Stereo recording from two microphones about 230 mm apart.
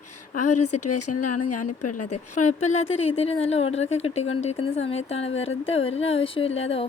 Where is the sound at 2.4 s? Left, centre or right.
Left.